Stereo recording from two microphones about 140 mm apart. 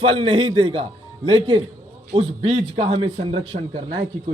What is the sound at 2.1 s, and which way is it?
A man's voice, 45° right (ahead or behind).